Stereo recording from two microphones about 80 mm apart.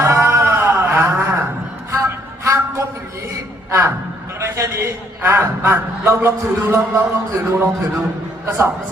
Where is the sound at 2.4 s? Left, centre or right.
Right.